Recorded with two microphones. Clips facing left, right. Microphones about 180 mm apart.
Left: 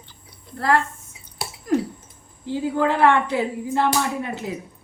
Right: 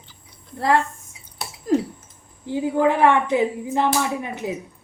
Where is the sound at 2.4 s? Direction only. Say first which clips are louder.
Right 2 dB; 15° right (ahead or behind).